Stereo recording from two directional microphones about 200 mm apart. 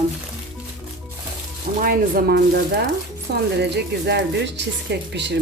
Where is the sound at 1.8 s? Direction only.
45° right (ahead or behind).